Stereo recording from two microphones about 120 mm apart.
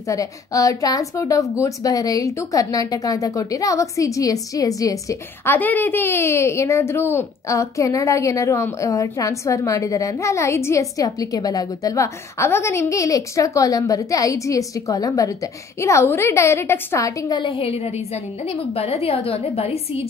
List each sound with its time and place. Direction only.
0.1 s speech: 30° left (ahead or behind)
5.4 s speech: 15° left (ahead or behind)
17.3 s a woman's voice: 45° left (ahead or behind)
18.8 s a woman's voice: 55° left (ahead or behind)